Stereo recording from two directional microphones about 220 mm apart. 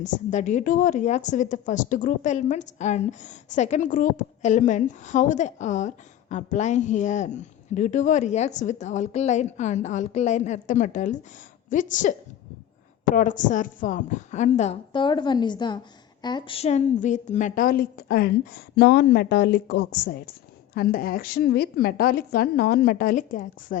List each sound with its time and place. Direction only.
0.0 s a woman's voice: 35° left (ahead or behind)
13.1 s a woman's voice: 35° left (ahead or behind)